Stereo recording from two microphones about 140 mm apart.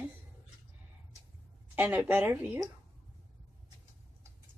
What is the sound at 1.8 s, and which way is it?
Speech, 15° right (ahead or behind).